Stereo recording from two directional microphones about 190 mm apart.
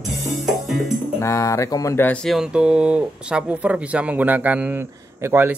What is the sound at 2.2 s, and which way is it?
Speech, 5° right (ahead or behind).